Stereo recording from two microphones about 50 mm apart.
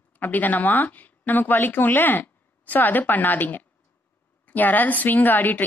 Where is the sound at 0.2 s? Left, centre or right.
Left.